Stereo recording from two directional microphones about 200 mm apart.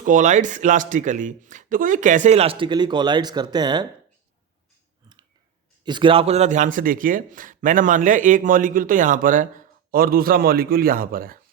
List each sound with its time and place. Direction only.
0.0 s a man's voice: 40° right (ahead or behind); by 3.8 s 20° right (ahead or behind)
5.8 s a man's voice: 25° right (ahead or behind); by 11.3 s 45° right (ahead or behind)